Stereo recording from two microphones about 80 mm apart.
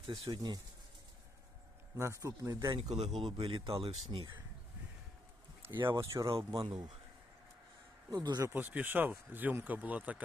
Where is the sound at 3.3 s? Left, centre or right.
Right.